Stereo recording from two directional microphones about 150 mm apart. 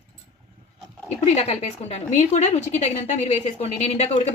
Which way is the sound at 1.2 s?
45° left (ahead or behind).